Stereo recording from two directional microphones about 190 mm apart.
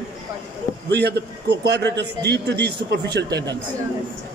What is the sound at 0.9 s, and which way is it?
A man's voice, 60° right (ahead or behind).